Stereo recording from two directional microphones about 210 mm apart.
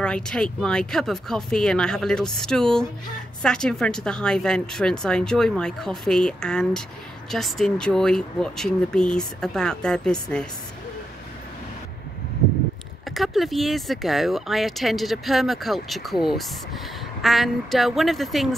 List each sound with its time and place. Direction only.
0.0 s speech: 5° left (ahead or behind)
13.1 s speech: centre (ahead or behind)